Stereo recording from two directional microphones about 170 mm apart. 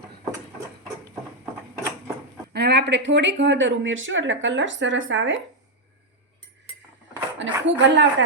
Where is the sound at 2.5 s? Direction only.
75° right (ahead or behind).